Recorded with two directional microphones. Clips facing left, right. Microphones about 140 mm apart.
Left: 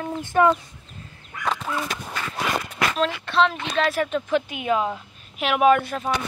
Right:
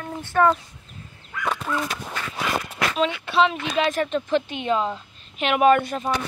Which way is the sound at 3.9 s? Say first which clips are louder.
Even; 10° left (ahead or behind).